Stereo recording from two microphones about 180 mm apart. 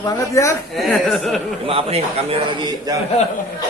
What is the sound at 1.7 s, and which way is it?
A man's voice, 35° right (ahead or behind).